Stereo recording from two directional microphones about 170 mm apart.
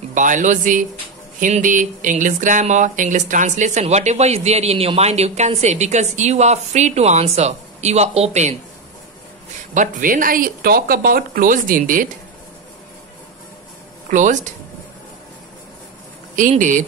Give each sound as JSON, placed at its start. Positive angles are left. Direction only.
{"t": 0.1, "sound": "speech", "side_deg": -50}
{"t": 9.8, "sound": "speech", "side_deg": -50}
{"t": 14.1, "sound": "speech", "side_deg": -45}
{"t": 16.3, "sound": "speech", "side_deg": -50}